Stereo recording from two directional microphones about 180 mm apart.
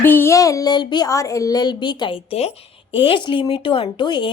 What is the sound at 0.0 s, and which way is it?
Child singing, 10° left (ahead or behind).